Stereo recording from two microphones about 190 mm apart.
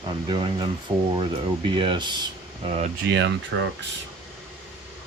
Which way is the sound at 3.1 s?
70° right (ahead or behind).